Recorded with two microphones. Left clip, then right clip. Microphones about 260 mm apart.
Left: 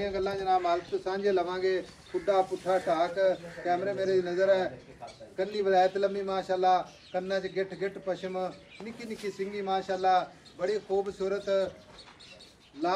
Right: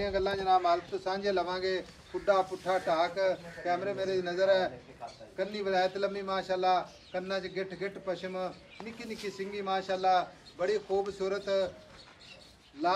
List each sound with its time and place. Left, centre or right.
0.0 s a man's voice: right